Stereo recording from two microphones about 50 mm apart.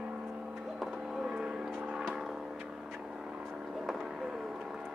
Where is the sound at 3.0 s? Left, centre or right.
Centre.